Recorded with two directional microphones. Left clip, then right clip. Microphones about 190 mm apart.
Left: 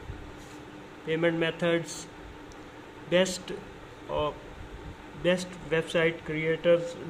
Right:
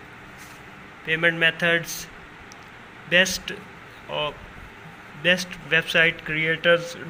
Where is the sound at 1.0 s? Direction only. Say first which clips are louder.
Right 7 dB; 15° left (ahead or behind).